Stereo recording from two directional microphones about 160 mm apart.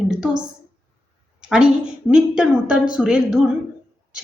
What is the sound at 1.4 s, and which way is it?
A woman's voice, 5° right (ahead or behind).